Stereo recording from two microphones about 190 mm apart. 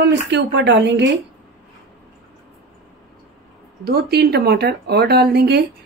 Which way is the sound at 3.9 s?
55° right (ahead or behind).